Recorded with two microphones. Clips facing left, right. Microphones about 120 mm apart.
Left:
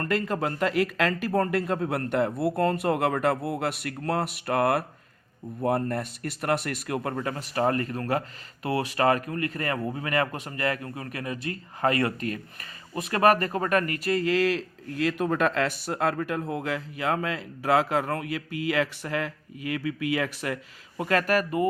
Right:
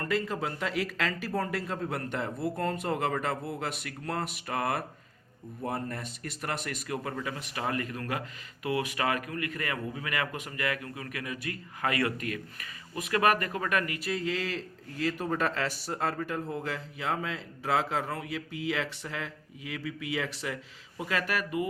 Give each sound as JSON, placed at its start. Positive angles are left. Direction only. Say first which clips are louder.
{"t": 0.0, "sound": "speech", "louder": "left 4 dB", "side_deg": 55}
{"t": 7.3, "sound": "a man's voice", "louder": "left 7 dB", "side_deg": 40}